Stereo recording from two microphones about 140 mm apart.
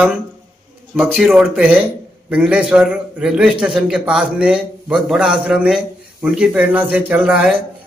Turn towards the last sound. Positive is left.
turn(degrees=-5)  # may be behind; listen again after turning